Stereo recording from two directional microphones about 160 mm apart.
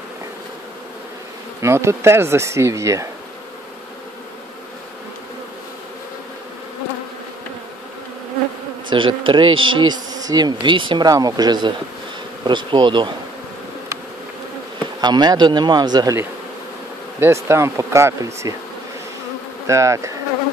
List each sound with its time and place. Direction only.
1.6 s speech: 15° right (ahead or behind)
8.9 s bee: 30° right (ahead or behind)
15.0 s bee: 25° right (ahead or behind)
17.2 s speech: 15° right (ahead or behind)
19.6 s bee: 20° right (ahead or behind)